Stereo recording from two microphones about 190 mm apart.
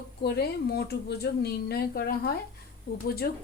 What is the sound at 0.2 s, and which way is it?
A woman's voice, 55° left (ahead or behind).